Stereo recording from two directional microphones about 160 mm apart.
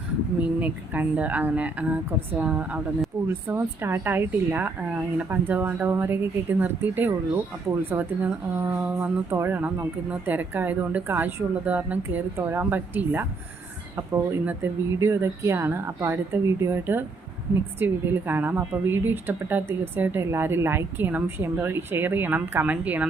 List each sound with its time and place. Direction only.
0.6 s speech: 10° right (ahead or behind)